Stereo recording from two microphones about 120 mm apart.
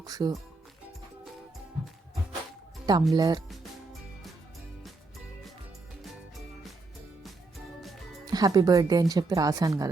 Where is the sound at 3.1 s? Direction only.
30° right (ahead or behind).